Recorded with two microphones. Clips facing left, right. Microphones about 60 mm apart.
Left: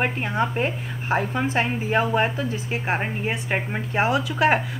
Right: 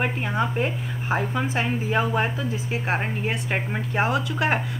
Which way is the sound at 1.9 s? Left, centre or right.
Left.